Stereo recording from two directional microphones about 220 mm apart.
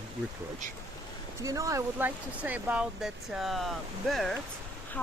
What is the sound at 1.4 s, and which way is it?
Speech, 15° right (ahead or behind).